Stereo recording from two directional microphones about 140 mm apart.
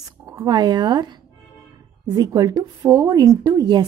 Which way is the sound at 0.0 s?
25° right (ahead or behind).